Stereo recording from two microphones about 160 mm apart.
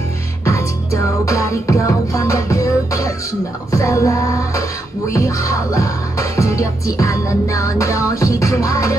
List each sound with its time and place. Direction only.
0.5 s music: 20° left (ahead or behind)